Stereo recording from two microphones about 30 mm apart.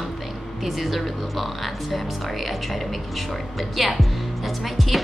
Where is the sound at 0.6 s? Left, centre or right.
Centre.